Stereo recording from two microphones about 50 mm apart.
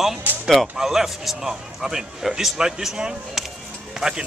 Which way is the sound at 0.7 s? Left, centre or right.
Centre.